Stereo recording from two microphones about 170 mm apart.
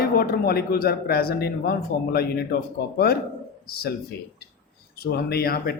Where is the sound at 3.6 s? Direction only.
65° left (ahead or behind).